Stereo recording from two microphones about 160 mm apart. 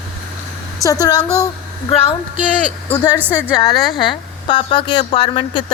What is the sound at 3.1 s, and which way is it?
Speech, 10° right (ahead or behind).